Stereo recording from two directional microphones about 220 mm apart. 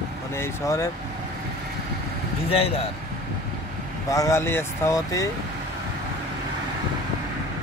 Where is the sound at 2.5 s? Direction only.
25° left (ahead or behind).